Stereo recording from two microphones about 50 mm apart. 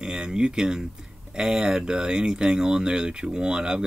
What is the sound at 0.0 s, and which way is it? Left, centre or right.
Speech, centre.